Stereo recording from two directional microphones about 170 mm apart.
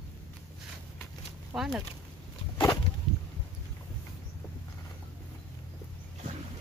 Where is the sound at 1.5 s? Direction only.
Centre (ahead or behind).